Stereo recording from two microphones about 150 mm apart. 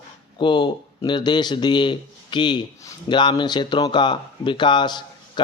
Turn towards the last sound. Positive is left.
turn(degrees=30)  # may be behind; listen again after turning